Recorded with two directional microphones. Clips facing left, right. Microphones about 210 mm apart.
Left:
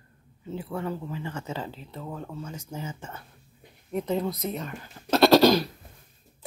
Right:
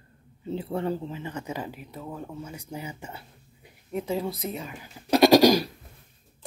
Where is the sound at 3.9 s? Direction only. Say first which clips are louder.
Left 1 dB; centre (ahead or behind).